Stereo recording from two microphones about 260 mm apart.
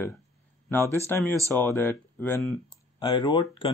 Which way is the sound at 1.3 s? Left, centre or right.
Centre.